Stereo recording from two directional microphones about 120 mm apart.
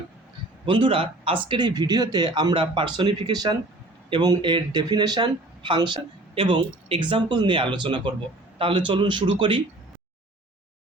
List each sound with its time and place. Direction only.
0.6 s speech: 45° right (ahead or behind)